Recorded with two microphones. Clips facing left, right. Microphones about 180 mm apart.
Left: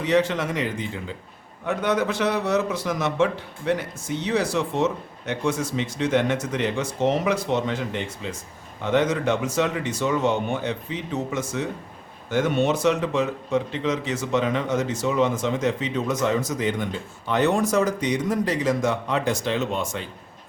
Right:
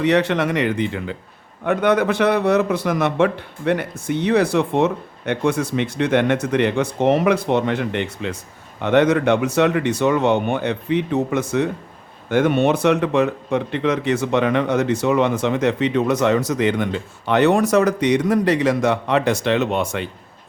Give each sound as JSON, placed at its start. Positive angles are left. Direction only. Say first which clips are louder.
{"t": 0.0, "sound": "a man's voice", "louder": "right 4 dB", "side_deg": -65}